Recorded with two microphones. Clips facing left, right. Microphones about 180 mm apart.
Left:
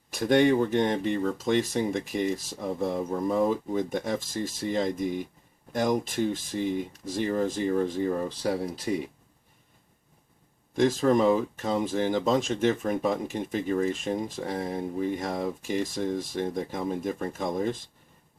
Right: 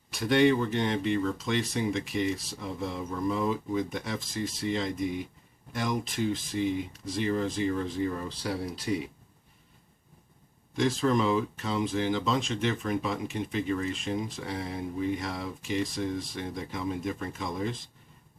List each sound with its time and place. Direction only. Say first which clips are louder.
0.1 s speech: left 2 dB; 45° left (ahead or behind)
10.8 s speech: left 4 dB; 45° left (ahead or behind)